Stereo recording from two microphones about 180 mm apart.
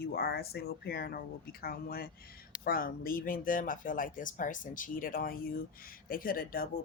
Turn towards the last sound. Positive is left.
turn(degrees=55)  # may be behind; listen again after turning